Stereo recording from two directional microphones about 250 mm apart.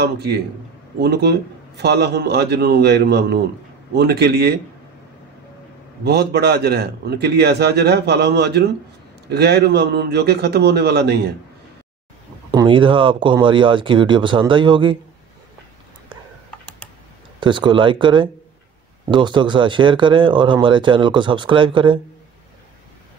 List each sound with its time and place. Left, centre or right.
0.0 s a man's voice: right
6.0 s a man's voice: right
12.4 s speech: centre
16.4 s typing: centre
17.4 s speech: centre